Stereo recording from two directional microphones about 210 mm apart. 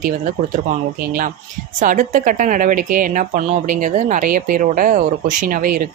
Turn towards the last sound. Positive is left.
turn(degrees=-40)  # may be behind; listen again after turning